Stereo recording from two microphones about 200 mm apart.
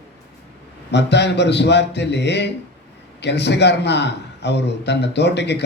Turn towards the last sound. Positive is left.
turn(degrees=60)  # may be behind; listen again after turning